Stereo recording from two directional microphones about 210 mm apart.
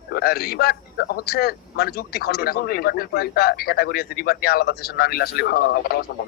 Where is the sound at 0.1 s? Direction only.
45° left (ahead or behind).